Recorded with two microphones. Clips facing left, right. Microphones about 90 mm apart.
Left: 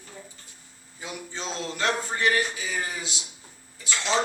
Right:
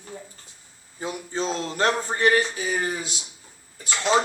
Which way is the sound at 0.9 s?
40° right (ahead or behind).